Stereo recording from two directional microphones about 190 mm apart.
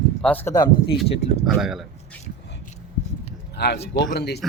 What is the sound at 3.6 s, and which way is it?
Speech, 60° left (ahead or behind).